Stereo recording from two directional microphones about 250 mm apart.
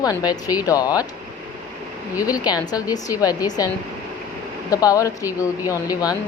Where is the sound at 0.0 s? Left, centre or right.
Centre.